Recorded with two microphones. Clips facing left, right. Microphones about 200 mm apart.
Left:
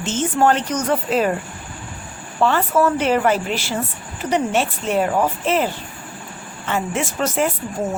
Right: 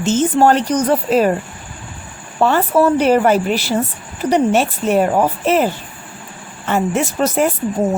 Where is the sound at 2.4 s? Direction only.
40° right (ahead or behind).